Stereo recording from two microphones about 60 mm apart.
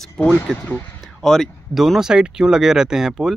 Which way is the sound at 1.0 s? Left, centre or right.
Centre.